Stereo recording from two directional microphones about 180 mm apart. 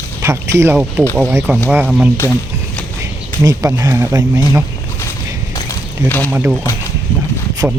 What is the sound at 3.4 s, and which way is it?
Speech, 20° right (ahead or behind).